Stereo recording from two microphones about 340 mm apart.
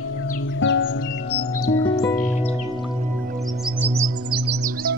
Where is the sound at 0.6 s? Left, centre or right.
Left.